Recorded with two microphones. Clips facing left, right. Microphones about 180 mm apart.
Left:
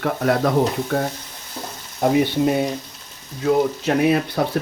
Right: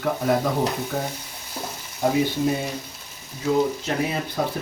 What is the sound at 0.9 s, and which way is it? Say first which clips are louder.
Speech: left 6 dB; 80° left.